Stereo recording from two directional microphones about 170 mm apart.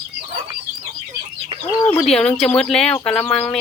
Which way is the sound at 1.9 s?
5° left (ahead or behind).